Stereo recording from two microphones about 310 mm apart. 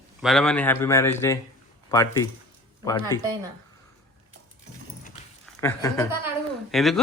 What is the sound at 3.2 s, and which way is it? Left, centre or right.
Speech, centre.